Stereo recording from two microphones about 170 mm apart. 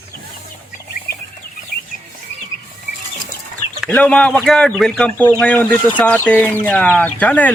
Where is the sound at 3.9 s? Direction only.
10° left (ahead or behind).